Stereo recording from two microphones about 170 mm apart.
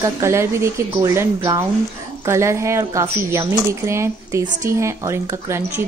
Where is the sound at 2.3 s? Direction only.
15° right (ahead or behind).